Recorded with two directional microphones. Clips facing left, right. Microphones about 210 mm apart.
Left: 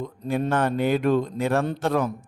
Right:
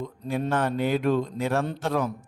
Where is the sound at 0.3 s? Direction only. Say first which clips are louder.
Left 3 dB; 55° left (ahead or behind).